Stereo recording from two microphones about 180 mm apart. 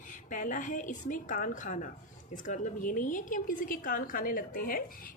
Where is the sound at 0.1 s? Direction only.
45° left (ahead or behind).